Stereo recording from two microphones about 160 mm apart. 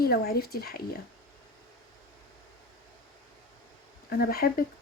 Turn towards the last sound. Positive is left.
turn(degrees=65)  # may be behind; listen again after turning